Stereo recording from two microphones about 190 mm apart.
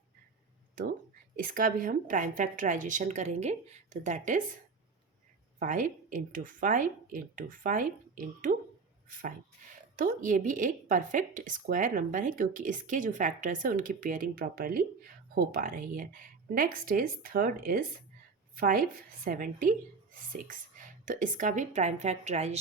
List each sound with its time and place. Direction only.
1.4 s a woman's voice: 45° right (ahead or behind)
5.5 s a woman's voice: 45° right (ahead or behind)